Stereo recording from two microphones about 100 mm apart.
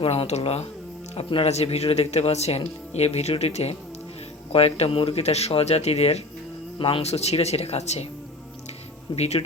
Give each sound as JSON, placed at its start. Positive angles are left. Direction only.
{"t": 0.0, "sound": "speech", "side_deg": 80}
{"t": 1.1, "sound": "speech", "side_deg": 70}
{"t": 6.7, "sound": "speech", "side_deg": 70}
{"t": 9.1, "sound": "speech", "side_deg": 90}